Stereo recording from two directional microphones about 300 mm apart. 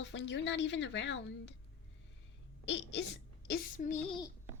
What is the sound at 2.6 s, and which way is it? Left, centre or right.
Speech, left.